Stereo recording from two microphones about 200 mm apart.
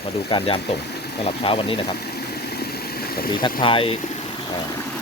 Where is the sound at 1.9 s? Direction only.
55° left (ahead or behind).